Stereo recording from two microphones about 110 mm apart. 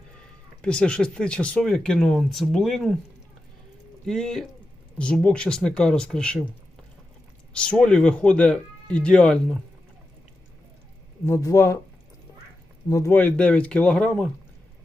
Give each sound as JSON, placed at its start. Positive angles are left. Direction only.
{"t": 0.6, "sound": "speech", "side_deg": 10}
{"t": 4.0, "sound": "speech", "side_deg": 5}
{"t": 7.5, "sound": "speech", "side_deg": 10}
{"t": 11.3, "sound": "speech", "side_deg": 25}
{"t": 12.9, "sound": "speech", "side_deg": 25}